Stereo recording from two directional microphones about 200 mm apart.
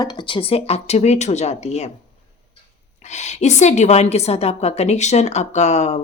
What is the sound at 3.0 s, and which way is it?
A woman's voice, 35° left (ahead or behind).